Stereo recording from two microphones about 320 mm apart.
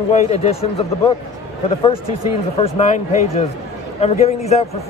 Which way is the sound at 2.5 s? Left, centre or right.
Centre.